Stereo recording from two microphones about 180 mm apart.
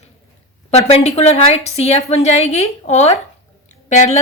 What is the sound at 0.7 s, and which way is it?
A woman's voice, 35° left (ahead or behind).